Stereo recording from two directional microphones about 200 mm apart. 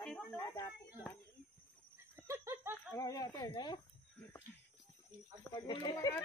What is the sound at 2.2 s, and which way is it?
Laughter, 15° right (ahead or behind).